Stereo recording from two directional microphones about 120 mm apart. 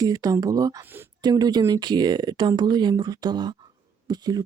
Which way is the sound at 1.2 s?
35° right (ahead or behind).